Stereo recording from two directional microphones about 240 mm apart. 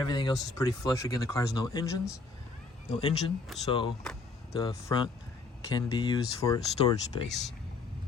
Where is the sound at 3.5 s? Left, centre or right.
Centre.